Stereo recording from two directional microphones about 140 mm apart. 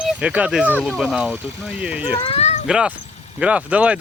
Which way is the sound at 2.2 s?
45° left (ahead or behind).